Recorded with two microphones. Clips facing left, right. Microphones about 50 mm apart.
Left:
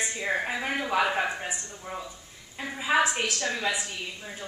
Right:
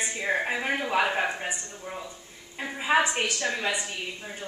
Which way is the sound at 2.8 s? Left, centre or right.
Centre.